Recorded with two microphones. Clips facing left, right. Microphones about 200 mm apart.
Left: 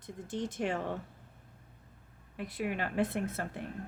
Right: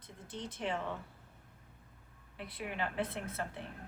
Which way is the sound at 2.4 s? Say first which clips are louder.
Left 5 dB; 45° left (ahead or behind).